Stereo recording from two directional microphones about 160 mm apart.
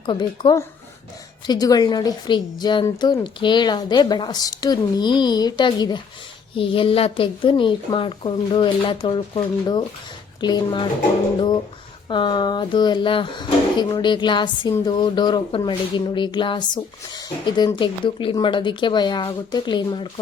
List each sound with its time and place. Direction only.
0.0 s a woman's voice: 30° left (ahead or behind)
12.0 s a woman's voice: 30° left (ahead or behind)